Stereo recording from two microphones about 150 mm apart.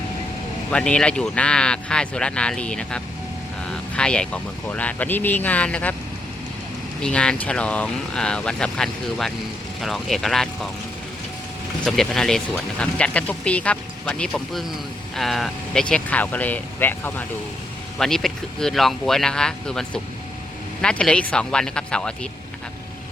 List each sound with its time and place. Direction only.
0.7 s speech: 5° left (ahead or behind)
7.0 s speech: 5° left (ahead or behind)
11.9 s speech: 5° left (ahead or behind)